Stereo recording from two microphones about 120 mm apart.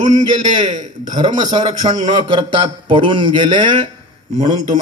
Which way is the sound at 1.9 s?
45° right (ahead or behind).